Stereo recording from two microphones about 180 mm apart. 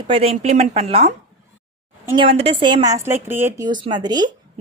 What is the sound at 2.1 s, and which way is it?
A woman's voice, 35° right (ahead or behind).